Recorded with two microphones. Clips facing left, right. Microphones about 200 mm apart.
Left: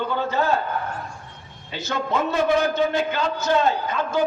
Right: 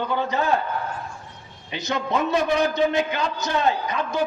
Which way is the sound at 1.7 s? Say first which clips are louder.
Even; 15° right (ahead or behind).